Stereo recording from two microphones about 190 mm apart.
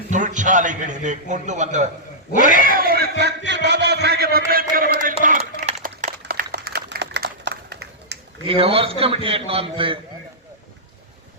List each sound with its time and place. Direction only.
0.1 s a man's voice: 40° right (ahead or behind)
2.3 s a sound: 40° right (ahead or behind); by 8.2 s 60° right (ahead or behind)
8.4 s a man's voice: 30° right (ahead or behind)